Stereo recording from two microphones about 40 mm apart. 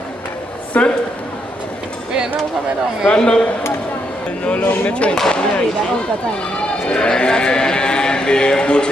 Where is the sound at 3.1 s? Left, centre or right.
Left.